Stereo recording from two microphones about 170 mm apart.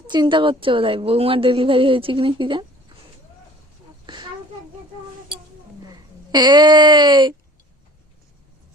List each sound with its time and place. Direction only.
0.1 s a woman's voice: 25° right (ahead or behind)
4.0 s a sound: 25° right (ahead or behind)
5.8 s speech: 25° right (ahead or behind)